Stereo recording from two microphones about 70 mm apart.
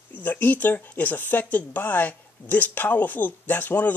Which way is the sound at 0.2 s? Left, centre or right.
Left.